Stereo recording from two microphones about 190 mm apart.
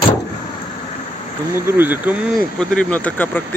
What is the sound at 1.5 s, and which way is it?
Speech, 10° right (ahead or behind).